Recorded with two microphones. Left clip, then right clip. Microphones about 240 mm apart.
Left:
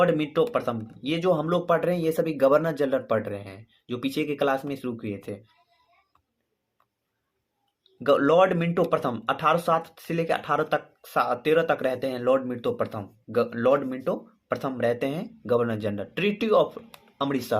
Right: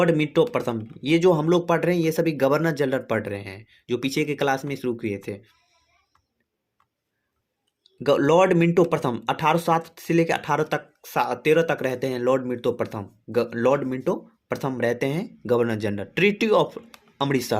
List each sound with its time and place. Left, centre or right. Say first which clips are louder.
0.0 s speech: right 2 dB; right
8.0 s speech: right 1 dB; right